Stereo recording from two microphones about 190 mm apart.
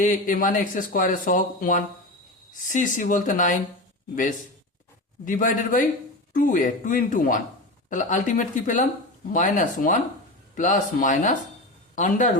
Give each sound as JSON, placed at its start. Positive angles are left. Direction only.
{"t": 0.0, "sound": "speech", "side_deg": 45}